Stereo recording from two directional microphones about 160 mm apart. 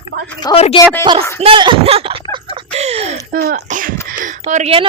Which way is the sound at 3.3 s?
65° right (ahead or behind).